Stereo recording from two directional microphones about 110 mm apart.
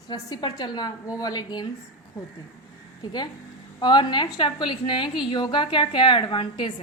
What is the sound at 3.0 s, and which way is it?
A woman's voice, 40° left (ahead or behind).